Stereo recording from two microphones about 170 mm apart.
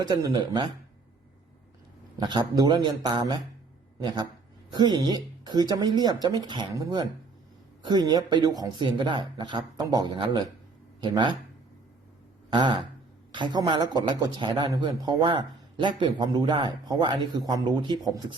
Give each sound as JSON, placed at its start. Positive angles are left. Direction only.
{"t": 0.0, "sound": "speech", "side_deg": -20}
{"t": 2.1, "sound": "speech", "side_deg": -25}
{"t": 12.5, "sound": "a sound", "side_deg": -25}
{"t": 13.3, "sound": "speech", "side_deg": -25}